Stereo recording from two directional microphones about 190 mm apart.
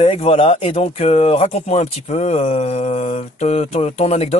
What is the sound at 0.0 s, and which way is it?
Speech, 30° left (ahead or behind).